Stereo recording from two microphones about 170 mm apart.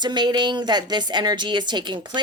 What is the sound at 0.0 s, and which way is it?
Speech, 25° right (ahead or behind).